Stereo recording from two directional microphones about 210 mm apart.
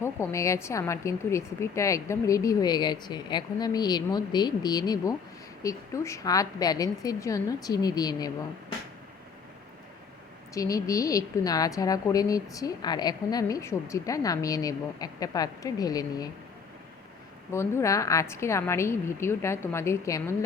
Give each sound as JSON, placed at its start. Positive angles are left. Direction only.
{"t": 0.0, "sound": "a woman's voice", "side_deg": 10}
{"t": 10.5, "sound": "a woman's voice", "side_deg": 15}
{"t": 17.5, "sound": "a woman's voice", "side_deg": 15}